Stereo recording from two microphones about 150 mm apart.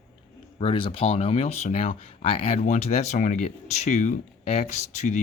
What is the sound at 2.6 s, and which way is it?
Speech, 50° left (ahead or behind).